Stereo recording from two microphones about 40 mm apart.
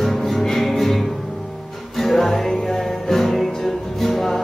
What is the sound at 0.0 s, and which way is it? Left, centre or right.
Music, centre.